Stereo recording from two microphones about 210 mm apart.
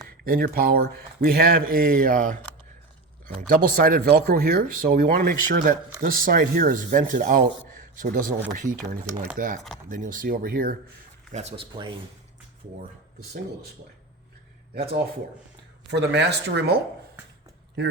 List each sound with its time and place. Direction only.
0.3 s speech: 45° right (ahead or behind)
3.5 s speech: 40° right (ahead or behind)
11.3 s speech: 30° right (ahead or behind)
15.9 s speech: 55° right (ahead or behind)
17.8 s speech: 50° right (ahead or behind)